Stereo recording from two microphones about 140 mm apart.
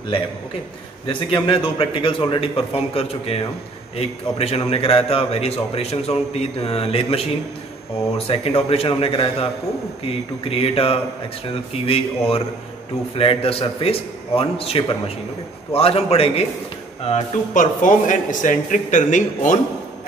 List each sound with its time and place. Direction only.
1.0 s a man's voice: 40° left (ahead or behind)
8.3 s a man's voice: 45° left (ahead or behind)
17.6 s a man's voice: 70° left (ahead or behind)